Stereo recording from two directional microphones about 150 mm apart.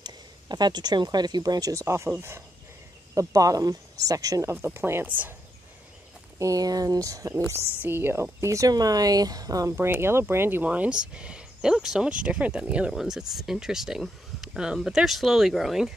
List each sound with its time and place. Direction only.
0.0 s speech: 30° right (ahead or behind); by 5.3 s 10° right (ahead or behind)
6.3 s speech: 20° right (ahead or behind); by 15.9 s centre (ahead or behind)